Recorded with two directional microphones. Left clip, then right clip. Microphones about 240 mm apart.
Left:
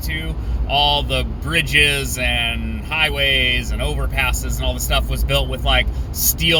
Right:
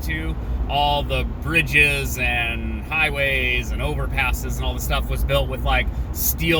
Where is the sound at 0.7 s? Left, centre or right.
Left.